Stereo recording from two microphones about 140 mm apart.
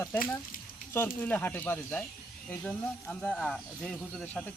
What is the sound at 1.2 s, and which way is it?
Speech, 10° left (ahead or behind).